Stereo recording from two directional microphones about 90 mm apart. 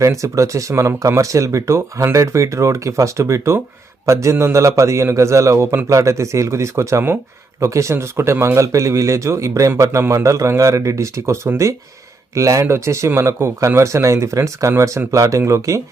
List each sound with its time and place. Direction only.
0.0 s speech: 35° right (ahead or behind)